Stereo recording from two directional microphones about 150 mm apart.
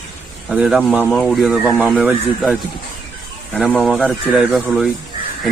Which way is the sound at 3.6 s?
Centre (ahead or behind).